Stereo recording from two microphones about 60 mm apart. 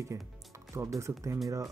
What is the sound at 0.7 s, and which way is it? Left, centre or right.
Speech, right.